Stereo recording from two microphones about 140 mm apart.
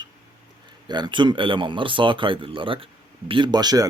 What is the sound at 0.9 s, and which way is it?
Speech, 30° right (ahead or behind).